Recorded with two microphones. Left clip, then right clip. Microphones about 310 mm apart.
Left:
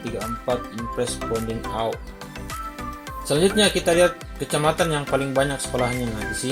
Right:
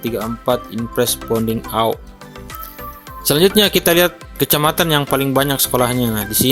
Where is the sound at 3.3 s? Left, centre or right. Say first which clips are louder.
Right 6 dB; right.